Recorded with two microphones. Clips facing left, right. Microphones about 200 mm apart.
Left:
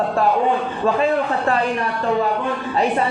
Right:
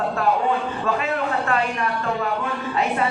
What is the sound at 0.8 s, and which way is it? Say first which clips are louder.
Speech: left 8 dB; 30° left (ahead or behind).